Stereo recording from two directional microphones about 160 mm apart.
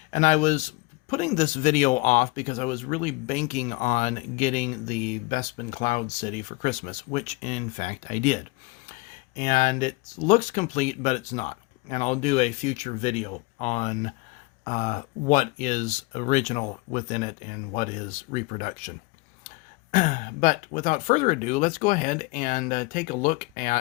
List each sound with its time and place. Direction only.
0.1 s speech: 50° left (ahead or behind)
19.9 s speech: 55° left (ahead or behind)